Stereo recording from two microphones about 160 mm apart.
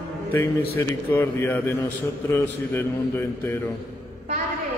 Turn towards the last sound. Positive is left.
turn(degrees=15)  # may be behind; listen again after turning